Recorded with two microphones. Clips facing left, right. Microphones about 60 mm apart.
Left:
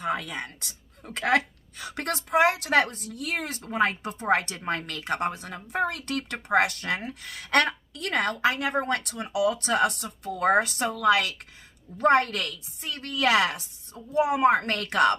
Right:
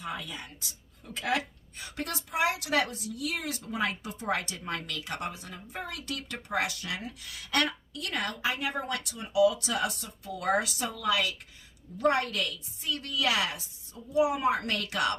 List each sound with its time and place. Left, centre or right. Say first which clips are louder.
0.0 s speech: left 8 dB; left
5.8 s speech: left 10 dB; left
8.8 s speech: left 6 dB; left
9.1 s speech: right 4 dB; left